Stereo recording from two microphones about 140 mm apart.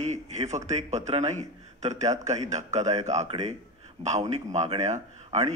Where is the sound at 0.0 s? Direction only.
55° right (ahead or behind).